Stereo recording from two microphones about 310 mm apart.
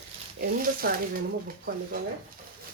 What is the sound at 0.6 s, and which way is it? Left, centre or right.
Speech, right.